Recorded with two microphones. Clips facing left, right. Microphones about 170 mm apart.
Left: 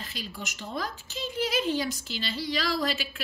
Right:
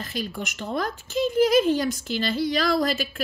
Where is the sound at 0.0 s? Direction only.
50° right (ahead or behind).